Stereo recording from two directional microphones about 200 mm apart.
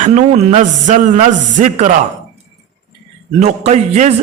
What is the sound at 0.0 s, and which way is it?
A man's voice, 35° right (ahead or behind).